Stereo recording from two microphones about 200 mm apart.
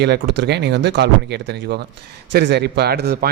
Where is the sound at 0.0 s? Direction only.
60° right (ahead or behind).